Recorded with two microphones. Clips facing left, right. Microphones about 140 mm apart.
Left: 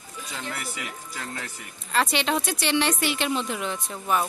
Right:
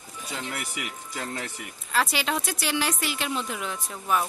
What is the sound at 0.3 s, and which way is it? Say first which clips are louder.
Speech: right 1 dB; 15° right (ahead or behind).